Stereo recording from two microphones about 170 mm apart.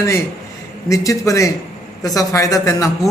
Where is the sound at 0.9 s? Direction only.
20° left (ahead or behind).